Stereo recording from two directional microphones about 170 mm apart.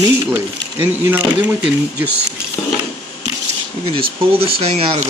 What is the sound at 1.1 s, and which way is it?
Speech, 10° right (ahead or behind).